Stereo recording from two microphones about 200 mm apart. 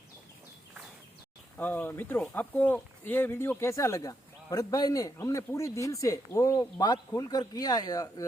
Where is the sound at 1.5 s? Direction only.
10° left (ahead or behind).